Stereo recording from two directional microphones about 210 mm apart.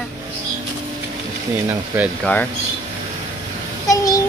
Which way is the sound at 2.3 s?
10° left (ahead or behind).